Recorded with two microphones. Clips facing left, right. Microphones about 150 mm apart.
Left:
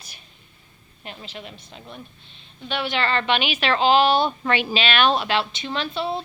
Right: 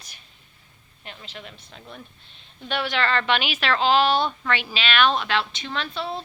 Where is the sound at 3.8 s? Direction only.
Centre (ahead or behind).